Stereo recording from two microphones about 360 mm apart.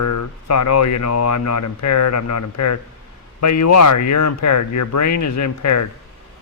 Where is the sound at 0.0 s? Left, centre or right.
Left.